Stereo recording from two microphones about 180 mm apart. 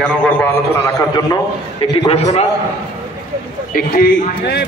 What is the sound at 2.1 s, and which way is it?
Speech, 35° left (ahead or behind).